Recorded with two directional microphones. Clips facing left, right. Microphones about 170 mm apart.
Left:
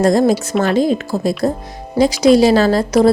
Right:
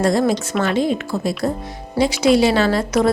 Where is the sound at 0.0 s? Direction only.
40° left (ahead or behind).